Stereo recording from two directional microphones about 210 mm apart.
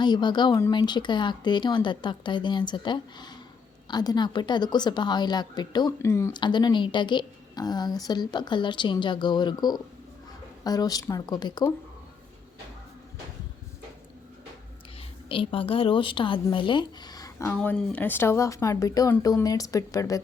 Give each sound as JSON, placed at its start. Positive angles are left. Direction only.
{"t": 0.0, "sound": "a woman's voice", "side_deg": 20}
{"t": 15.3, "sound": "speech", "side_deg": 25}